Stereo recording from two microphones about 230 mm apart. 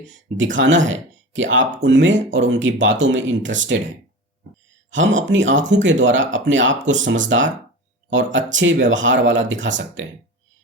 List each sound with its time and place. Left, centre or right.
0.1 s speech: right